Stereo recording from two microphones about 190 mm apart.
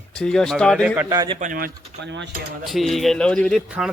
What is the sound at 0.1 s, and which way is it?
Speech, 5° left (ahead or behind).